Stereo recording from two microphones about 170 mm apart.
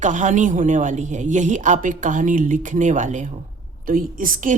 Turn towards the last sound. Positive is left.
turn(degrees=-50)  # may be behind; listen again after turning